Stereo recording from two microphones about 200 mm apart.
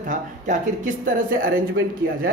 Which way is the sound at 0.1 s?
40° right (ahead or behind).